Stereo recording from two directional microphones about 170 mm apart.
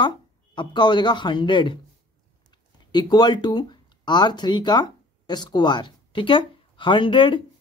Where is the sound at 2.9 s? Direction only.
25° left (ahead or behind).